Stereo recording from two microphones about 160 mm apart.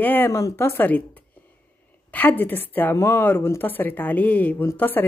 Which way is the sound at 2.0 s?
10° left (ahead or behind).